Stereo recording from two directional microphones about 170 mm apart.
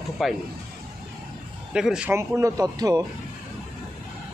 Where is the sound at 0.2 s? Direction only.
Centre (ahead or behind).